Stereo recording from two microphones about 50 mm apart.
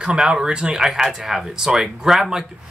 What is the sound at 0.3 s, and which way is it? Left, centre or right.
Speech, centre.